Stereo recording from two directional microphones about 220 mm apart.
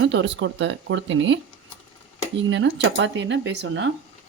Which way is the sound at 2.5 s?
55° right (ahead or behind).